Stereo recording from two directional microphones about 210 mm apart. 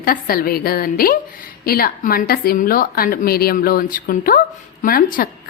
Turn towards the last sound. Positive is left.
turn(degrees=45)  # may be behind; listen again after turning